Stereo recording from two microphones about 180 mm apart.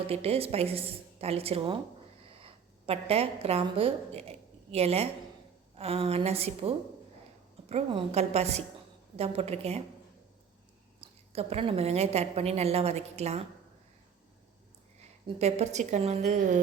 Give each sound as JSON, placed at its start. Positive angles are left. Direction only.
{"t": 0.1, "sound": "a woman's voice", "side_deg": -35}
{"t": 11.0, "sound": "a woman's voice", "side_deg": -35}
{"t": 15.4, "sound": "a woman's voice", "side_deg": -35}